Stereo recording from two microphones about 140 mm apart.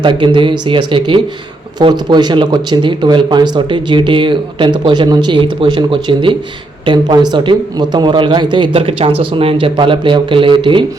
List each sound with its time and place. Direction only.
0.0 s speech: 35° right (ahead or behind)